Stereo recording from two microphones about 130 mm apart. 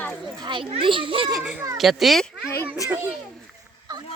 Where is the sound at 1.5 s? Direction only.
25° right (ahead or behind).